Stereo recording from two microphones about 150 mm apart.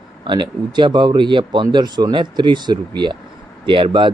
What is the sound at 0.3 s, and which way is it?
Speech, 30° right (ahead or behind).